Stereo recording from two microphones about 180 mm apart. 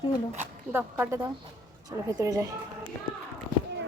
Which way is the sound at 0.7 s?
10° right (ahead or behind).